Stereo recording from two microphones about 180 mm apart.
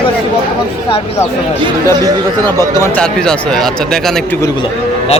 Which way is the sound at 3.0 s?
5° left (ahead or behind).